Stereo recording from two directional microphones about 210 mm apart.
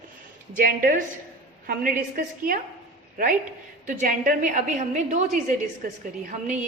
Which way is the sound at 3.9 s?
40° right (ahead or behind).